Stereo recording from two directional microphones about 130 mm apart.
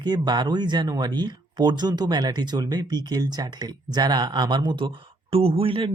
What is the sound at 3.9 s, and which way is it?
Speech, 30° right (ahead or behind).